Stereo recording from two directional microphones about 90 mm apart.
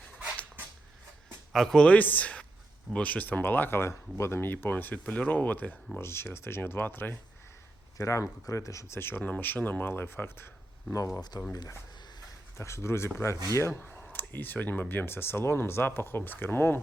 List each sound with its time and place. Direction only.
1.5 s a man's voice: 5° left (ahead or behind); by 7.2 s 20° left (ahead or behind)
7.9 s speech: 35° left (ahead or behind)
11.3 s speech: 40° left (ahead or behind)
12.5 s speech: 30° left (ahead or behind)